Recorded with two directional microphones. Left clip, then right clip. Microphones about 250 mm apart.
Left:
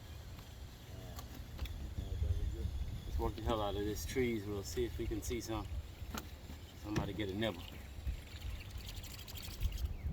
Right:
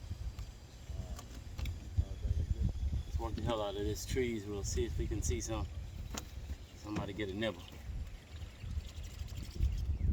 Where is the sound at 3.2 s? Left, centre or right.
Centre.